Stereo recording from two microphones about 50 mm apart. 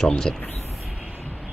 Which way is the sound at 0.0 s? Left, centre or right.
Centre.